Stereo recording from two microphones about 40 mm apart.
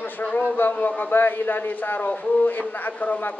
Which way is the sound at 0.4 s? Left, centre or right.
Left.